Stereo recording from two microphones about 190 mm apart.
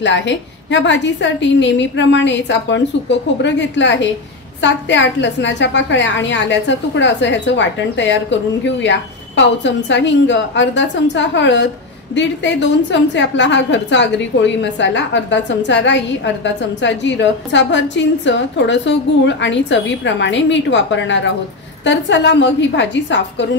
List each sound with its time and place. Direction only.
0.0 s a woman's voice: 70° left (ahead or behind)